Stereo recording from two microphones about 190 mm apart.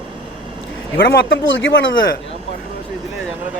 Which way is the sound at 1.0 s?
75° left (ahead or behind).